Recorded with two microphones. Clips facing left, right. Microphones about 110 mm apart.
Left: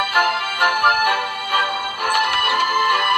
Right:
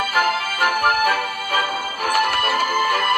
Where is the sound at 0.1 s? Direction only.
60° left (ahead or behind).